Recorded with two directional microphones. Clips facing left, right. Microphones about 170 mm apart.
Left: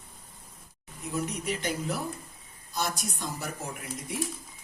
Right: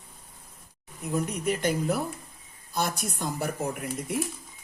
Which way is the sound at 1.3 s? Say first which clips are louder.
Right 5 dB; 50° right (ahead or behind).